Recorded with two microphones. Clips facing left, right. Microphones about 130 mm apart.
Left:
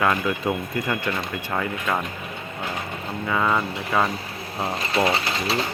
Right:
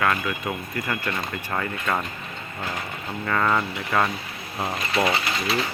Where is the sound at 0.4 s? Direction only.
30° left (ahead or behind).